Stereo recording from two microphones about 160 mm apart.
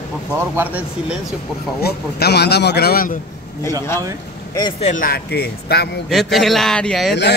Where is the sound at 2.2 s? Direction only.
90° left; by 3.1 s 70° left (ahead or behind).